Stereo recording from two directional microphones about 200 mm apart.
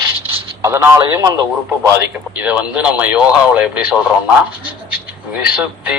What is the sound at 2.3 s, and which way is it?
A man's voice, 5° right (ahead or behind).